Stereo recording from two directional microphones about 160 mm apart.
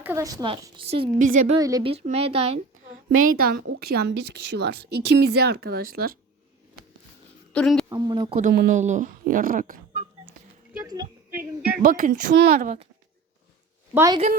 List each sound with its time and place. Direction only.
0.0 s a woman's voice: 15° right (ahead or behind)
0.8 s speech: 35° right (ahead or behind)
1.2 s a woman's voice: 55° right (ahead or behind)
1.5 s a woman's voice: 20° right (ahead or behind)
1.8 s speech: 35° right (ahead or behind)
3.1 s a woman's voice: 65° right (ahead or behind)
7.5 s a woman's voice: 5° left (ahead or behind)
7.9 s a woman's voice: 25° right (ahead or behind)
8.3 s a woman's voice: 55° right (ahead or behind)
10.8 s a woman's voice: 25° right (ahead or behind)
11.8 s a woman's voice: 55° right (ahead or behind)
13.9 s a woman's voice: 20° right (ahead or behind)